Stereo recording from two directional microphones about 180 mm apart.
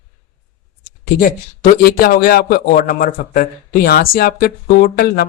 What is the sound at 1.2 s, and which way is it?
A man's voice, 55° left (ahead or behind).